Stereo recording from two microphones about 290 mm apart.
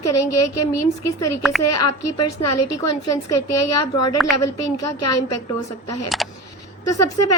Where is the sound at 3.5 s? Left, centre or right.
Left.